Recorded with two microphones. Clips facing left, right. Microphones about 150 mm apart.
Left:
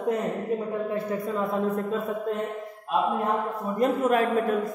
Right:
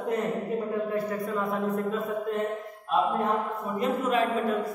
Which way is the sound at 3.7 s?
50° left (ahead or behind).